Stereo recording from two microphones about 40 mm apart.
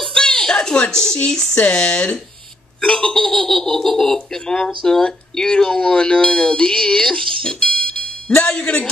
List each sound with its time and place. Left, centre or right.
0.0 s a sound: centre
1.3 s speech: centre
1.6 s speech: left